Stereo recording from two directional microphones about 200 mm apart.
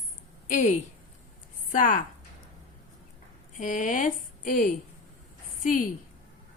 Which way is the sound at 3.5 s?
40° left (ahead or behind).